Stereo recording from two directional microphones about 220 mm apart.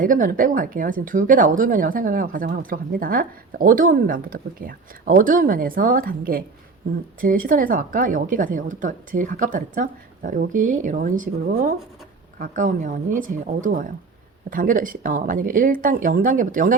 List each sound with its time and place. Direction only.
0.0 s speech: 40° right (ahead or behind)